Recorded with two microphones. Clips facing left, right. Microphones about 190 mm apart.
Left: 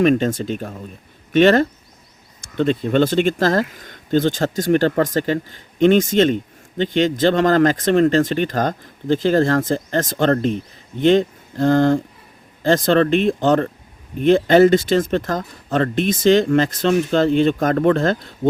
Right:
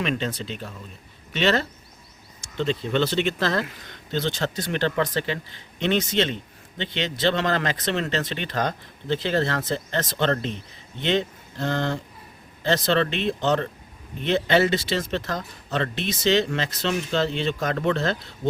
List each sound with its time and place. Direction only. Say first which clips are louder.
0.0 s speech: left 11 dB; 45° left (ahead or behind)